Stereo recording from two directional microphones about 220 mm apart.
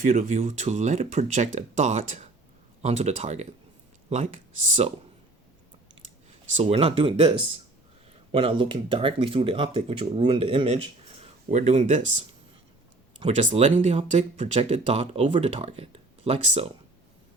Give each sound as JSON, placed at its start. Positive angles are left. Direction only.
{"t": 0.0, "sound": "speech", "side_deg": -35}
{"t": 6.6, "sound": "speech", "side_deg": -25}